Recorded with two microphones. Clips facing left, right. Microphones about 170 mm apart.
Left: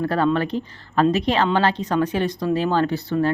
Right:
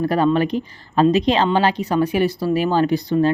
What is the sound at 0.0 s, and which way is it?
Speech, 15° right (ahead or behind).